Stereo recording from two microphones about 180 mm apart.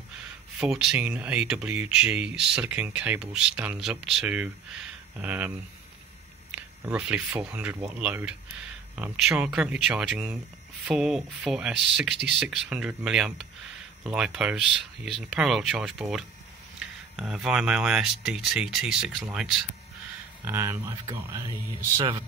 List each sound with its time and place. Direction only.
0.6 s speech: 5° right (ahead or behind)
6.5 s speech: 10° right (ahead or behind)
20.4 s speech: 15° right (ahead or behind)